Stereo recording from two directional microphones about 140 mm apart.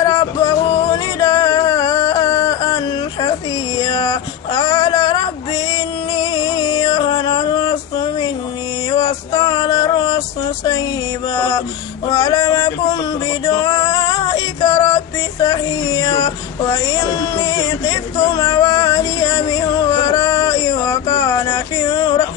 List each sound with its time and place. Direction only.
0.0 s music: 25° left (ahead or behind)
11.3 s a sound: 25° left (ahead or behind)
13.5 s female singing: 30° left (ahead or behind)
15.4 s child singing: 25° left (ahead or behind)